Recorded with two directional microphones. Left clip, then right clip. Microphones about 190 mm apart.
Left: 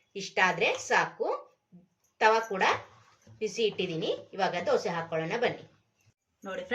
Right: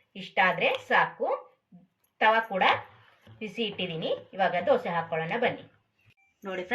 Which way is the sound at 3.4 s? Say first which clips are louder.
Left 3 dB; 75° left (ahead or behind).